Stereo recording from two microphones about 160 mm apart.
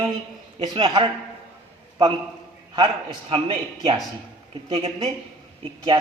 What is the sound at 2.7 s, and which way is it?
A man's voice, 30° right (ahead or behind).